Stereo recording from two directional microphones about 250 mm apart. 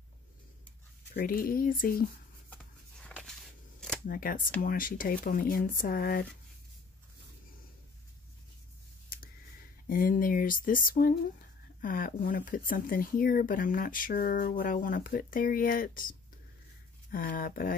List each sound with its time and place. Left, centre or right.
1.1 s speech: left
2.5 s a sound: centre
4.1 s speech: left
9.8 s speech: left